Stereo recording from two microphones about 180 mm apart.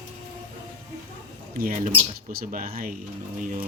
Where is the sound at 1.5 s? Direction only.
50° right (ahead or behind).